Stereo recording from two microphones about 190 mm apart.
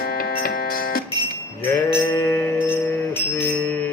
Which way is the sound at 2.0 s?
10° left (ahead or behind).